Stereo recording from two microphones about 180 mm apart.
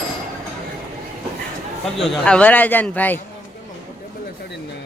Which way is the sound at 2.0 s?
5° left (ahead or behind).